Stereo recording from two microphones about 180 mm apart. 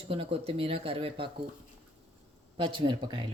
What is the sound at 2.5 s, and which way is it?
Speech, 30° right (ahead or behind).